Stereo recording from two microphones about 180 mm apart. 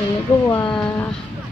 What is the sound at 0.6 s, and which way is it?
Speech, 5° left (ahead or behind).